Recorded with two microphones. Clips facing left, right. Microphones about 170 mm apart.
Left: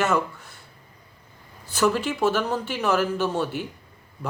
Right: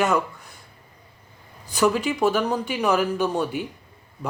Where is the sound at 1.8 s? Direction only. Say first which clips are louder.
Right 1 dB; 10° right (ahead or behind).